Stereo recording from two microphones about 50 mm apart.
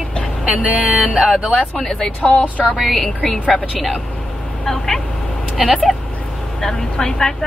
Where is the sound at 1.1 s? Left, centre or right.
Centre.